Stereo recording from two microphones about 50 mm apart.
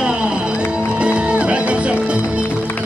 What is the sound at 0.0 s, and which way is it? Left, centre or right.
Music, centre.